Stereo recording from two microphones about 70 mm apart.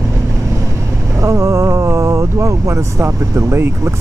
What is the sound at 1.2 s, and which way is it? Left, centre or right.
Speech, right.